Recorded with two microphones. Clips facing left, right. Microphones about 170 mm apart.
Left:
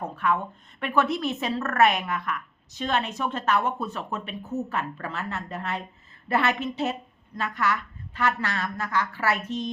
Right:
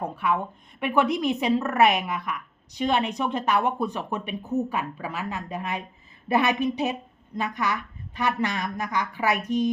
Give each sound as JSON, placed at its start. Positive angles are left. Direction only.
{"t": 0.0, "sound": "a woman's voice", "side_deg": -10}